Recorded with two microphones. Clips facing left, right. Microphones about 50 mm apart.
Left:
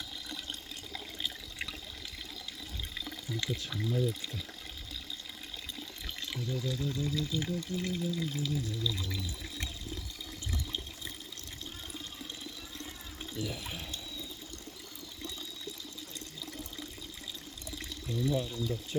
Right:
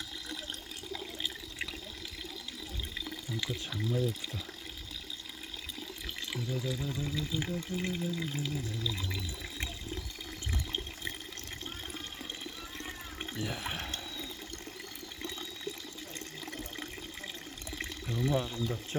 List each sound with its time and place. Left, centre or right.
0.9 s water: centre
2.9 s water: centre
3.7 s speech: centre
6.1 s speech: centre
13.4 s speech: right
17.7 s speech: right